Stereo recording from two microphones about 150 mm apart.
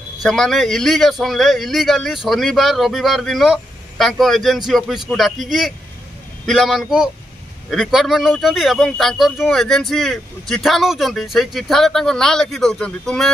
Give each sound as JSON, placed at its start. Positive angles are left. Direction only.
{"t": 0.2, "sound": "speech", "side_deg": 0}